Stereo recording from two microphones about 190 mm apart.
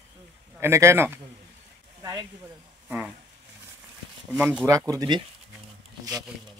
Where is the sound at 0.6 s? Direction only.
15° right (ahead or behind).